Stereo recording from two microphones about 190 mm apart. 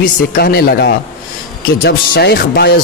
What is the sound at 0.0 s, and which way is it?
Speech, 55° left (ahead or behind).